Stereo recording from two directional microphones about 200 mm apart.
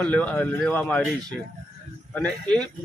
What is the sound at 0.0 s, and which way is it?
Speech, 5° left (ahead or behind).